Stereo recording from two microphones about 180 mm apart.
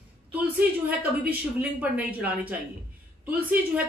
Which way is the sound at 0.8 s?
10° right (ahead or behind).